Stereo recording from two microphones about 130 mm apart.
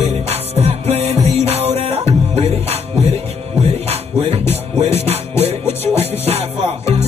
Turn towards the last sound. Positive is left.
turn(degrees=-50)  # may be behind; listen again after turning